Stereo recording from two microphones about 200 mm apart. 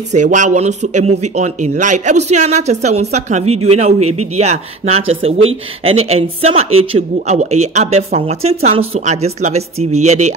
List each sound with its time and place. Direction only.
0.1 s speech: 40° right (ahead or behind)